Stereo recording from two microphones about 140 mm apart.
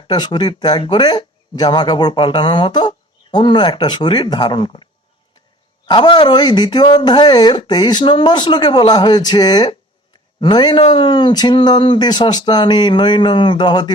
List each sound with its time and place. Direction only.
0.1 s speech: 30° left (ahead or behind)